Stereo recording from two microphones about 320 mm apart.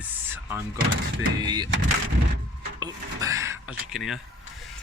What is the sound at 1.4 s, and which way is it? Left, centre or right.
Speech, centre.